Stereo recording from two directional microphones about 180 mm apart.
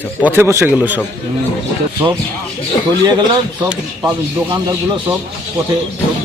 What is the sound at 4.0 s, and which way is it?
Speech, 20° right (ahead or behind).